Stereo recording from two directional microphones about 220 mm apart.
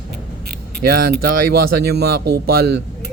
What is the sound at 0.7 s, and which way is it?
Speech, 45° right (ahead or behind).